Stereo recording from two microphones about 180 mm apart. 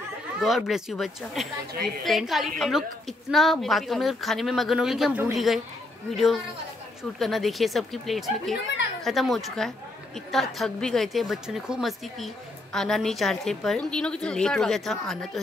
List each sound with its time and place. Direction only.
0.4 s a woman's voice: centre (ahead or behind)
8.6 s a sound: 75° left (ahead or behind)
9.0 s a woman's voice: centre (ahead or behind)